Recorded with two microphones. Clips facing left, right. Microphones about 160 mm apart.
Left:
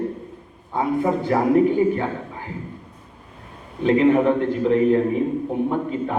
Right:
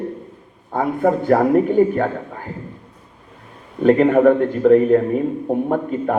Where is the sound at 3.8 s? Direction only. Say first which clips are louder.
Right 3 dB; 50° right (ahead or behind).